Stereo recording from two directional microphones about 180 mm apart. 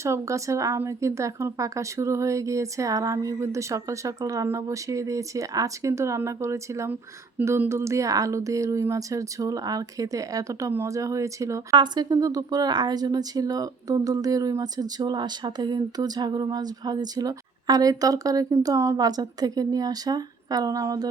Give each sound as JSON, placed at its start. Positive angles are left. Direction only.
{"t": 0.0, "sound": "a woman's voice", "side_deg": -15}